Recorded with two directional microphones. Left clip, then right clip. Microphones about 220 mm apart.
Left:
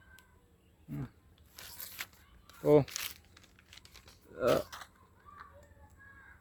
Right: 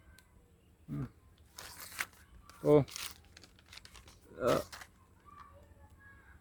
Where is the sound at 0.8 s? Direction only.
Centre (ahead or behind).